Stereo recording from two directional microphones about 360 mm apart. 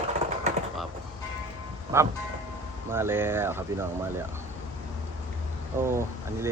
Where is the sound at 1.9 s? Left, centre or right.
Centre.